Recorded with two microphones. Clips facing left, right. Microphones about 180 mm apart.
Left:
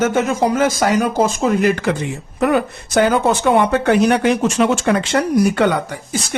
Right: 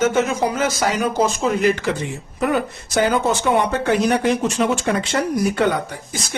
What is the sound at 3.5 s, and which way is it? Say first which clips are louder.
Speech: left 5 dB; 70° left (ahead or behind).